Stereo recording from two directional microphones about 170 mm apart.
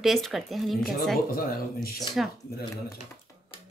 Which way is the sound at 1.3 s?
60° left (ahead or behind).